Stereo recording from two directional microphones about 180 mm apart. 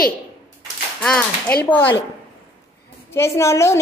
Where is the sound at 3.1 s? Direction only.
15° left (ahead or behind).